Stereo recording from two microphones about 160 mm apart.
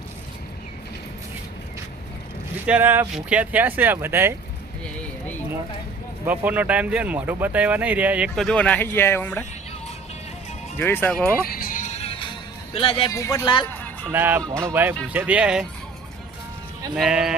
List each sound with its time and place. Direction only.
2.6 s speech: 10° right (ahead or behind)
6.2 s speech: 10° right (ahead or behind); by 9.5 s 10° left (ahead or behind)
10.8 s speech: 15° left (ahead or behind)
11.4 s music: 65° left (ahead or behind); by 13.1 s 35° left (ahead or behind)
13.1 s speech: 20° left (ahead or behind)
13.7 s music: 10° left (ahead or behind)
14.0 s speech: 15° right (ahead or behind)
16.9 s speech: 5° right (ahead or behind)